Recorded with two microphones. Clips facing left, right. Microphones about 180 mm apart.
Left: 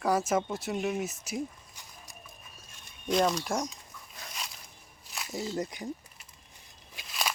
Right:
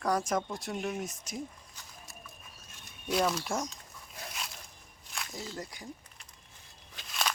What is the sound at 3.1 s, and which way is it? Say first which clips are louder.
Speech: left 3 dB; 5° right (ahead or behind).